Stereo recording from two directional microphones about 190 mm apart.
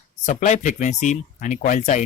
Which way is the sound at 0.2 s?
40° left (ahead or behind).